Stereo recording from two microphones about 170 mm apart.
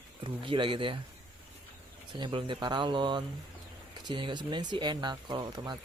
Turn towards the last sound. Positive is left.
turn(degrees=-25)  # may be behind; listen again after turning